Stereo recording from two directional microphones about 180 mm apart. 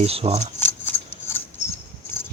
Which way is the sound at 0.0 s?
35° right (ahead or behind).